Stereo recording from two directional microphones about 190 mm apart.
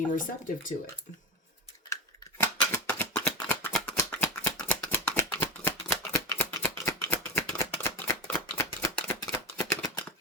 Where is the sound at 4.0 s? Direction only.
10° left (ahead or behind).